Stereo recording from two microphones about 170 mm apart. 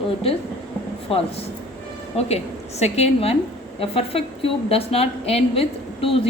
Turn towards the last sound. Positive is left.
turn(degrees=35)  # may be behind; listen again after turning